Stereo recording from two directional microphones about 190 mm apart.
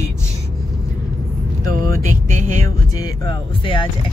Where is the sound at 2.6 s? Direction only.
20° left (ahead or behind).